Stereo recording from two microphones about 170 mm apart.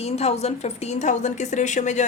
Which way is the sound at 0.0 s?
40° left (ahead or behind).